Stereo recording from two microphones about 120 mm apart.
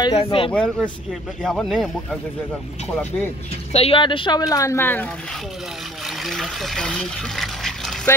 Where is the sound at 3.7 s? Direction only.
55° left (ahead or behind).